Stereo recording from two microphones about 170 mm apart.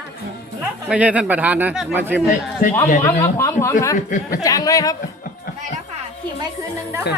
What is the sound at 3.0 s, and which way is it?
Speech, 15° left (ahead or behind).